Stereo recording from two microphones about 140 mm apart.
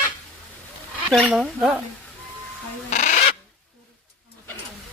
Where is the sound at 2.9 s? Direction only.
60° left (ahead or behind).